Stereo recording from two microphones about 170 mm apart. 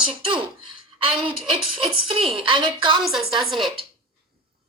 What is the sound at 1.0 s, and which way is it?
A woman's voice, 30° right (ahead or behind).